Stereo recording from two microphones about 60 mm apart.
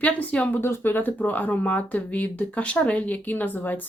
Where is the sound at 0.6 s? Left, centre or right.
Left.